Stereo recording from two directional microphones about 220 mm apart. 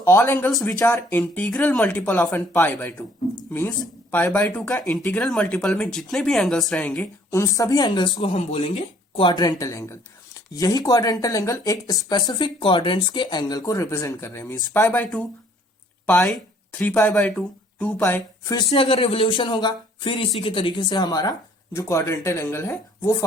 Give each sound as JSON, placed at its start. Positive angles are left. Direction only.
{"t": 0.0, "sound": "speech", "side_deg": 10}
{"t": 4.1, "sound": "speech", "side_deg": 10}
{"t": 18.7, "sound": "a sound", "side_deg": 25}
{"t": 20.4, "sound": "speech", "side_deg": 25}